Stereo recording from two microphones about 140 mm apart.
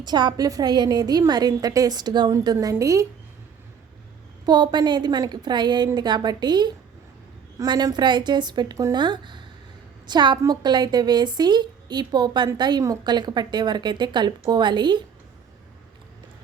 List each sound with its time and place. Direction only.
0.0 s a woman's voice: 30° right (ahead or behind)
4.4 s speech: 30° right (ahead or behind)